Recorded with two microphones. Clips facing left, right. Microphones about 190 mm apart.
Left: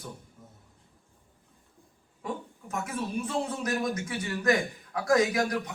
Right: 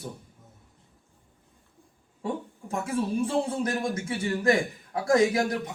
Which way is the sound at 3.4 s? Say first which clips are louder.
Right 2 dB; 25° right (ahead or behind).